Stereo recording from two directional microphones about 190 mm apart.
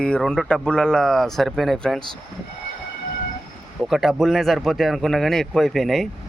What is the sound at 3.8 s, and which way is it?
Speech, centre (ahead or behind).